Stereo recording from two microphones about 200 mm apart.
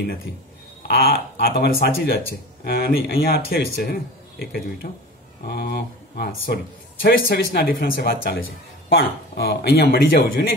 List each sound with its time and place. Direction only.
0.8 s speech: 55° left (ahead or behind)